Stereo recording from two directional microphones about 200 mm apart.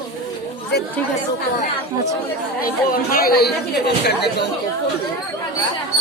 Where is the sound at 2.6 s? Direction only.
45° left (ahead or behind).